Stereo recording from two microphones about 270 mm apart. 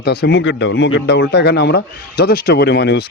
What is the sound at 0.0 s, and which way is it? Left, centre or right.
Speech, left.